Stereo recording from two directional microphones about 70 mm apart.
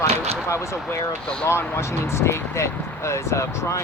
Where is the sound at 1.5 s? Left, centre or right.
Left.